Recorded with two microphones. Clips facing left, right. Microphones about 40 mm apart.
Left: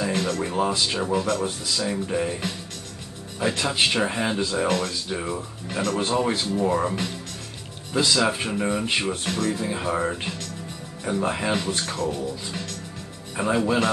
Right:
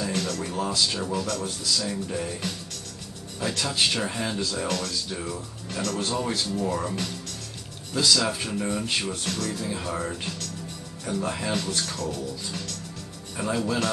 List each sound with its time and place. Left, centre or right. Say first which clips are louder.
0.0 s speech: left 4 dB; left